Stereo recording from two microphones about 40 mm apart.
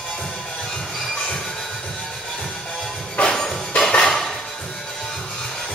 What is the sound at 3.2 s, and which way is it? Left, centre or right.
Music, left.